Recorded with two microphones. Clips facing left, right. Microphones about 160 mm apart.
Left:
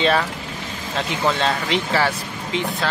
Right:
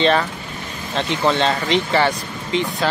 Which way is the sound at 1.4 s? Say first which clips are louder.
Right 3 dB; 5° left (ahead or behind).